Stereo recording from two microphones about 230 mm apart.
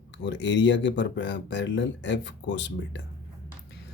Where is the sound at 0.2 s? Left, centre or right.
Left.